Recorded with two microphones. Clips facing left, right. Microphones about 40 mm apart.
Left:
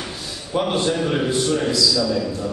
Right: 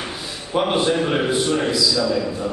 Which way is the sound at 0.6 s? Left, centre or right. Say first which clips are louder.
Right 2 dB; centre.